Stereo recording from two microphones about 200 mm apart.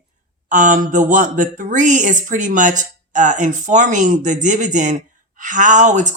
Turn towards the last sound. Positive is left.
turn(degrees=-35)  # may be behind; listen again after turning